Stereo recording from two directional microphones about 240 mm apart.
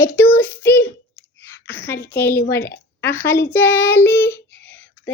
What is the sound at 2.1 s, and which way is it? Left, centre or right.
A child's voice, centre.